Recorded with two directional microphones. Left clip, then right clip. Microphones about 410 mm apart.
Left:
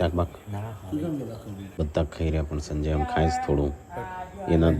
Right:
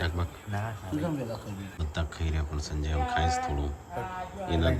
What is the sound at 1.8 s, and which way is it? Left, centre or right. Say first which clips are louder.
Speech: left 10 dB; centre.